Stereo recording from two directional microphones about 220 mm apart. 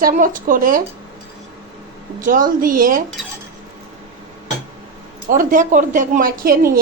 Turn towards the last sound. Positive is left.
turn(degrees=-40)  # may be behind; listen again after turning